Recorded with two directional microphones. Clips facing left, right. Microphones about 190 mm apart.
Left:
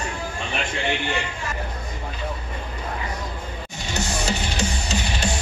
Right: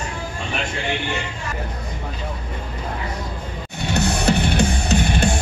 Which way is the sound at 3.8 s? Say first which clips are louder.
Right 7 dB; 60° right (ahead or behind).